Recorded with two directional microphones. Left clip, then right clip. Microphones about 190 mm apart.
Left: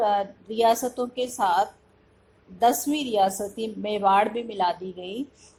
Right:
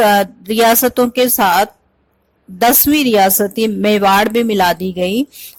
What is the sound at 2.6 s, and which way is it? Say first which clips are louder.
A woman's voice: right 10 dB; 40° right (ahead or behind).